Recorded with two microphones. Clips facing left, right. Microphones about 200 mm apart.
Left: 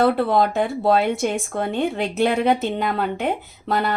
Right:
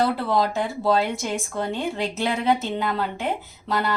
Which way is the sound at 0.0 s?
55° left (ahead or behind).